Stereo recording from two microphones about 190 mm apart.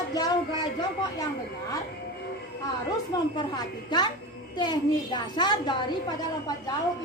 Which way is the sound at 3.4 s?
20° left (ahead or behind).